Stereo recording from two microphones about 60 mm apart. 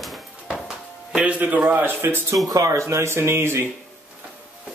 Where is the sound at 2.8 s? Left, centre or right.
Right.